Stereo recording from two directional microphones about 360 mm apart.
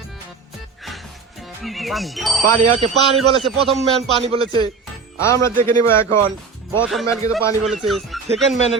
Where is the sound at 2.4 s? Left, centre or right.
Right.